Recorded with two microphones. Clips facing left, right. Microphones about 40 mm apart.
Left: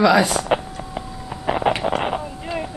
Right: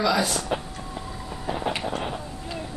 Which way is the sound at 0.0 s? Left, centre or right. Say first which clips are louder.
Left 8 dB; left.